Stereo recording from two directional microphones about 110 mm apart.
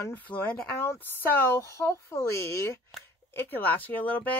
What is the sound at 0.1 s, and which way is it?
Speech, 15° left (ahead or behind).